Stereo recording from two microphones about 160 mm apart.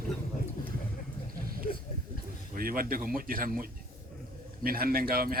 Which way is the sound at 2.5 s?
65° right (ahead or behind).